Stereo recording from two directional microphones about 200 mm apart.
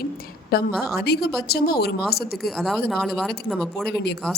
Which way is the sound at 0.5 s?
50° left (ahead or behind).